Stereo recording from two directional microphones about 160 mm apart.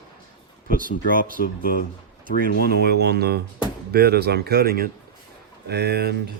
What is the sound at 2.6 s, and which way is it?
Speech, 90° right.